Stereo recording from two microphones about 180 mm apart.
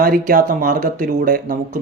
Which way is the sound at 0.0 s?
55° right (ahead or behind).